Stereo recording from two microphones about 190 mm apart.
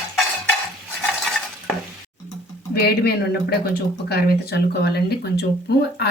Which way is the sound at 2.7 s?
55° left (ahead or behind).